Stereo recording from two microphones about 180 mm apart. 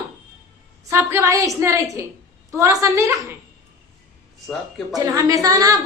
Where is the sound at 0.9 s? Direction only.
15° right (ahead or behind).